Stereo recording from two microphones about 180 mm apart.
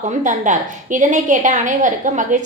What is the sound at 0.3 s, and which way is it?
A woman's voice, 45° right (ahead or behind).